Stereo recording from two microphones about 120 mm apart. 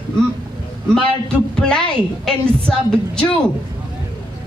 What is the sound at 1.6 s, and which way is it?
A woman's voice, 5° left (ahead or behind).